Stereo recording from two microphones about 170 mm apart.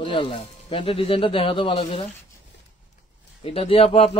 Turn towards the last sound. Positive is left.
turn(degrees=35)  # may be behind; listen again after turning